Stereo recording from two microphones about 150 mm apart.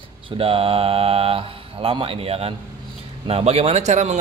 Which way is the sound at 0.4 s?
40° right (ahead or behind).